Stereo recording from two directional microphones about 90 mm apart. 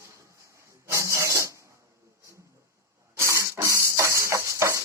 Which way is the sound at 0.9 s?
35° right (ahead or behind).